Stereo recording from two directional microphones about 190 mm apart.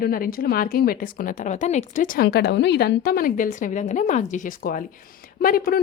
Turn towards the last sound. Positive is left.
turn(degrees=50)  # may be behind; listen again after turning